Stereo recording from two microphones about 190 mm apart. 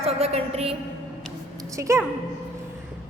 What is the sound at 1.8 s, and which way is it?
Speech, 15° right (ahead or behind).